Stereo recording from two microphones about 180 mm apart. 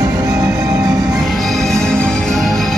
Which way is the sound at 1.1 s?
Centre (ahead or behind).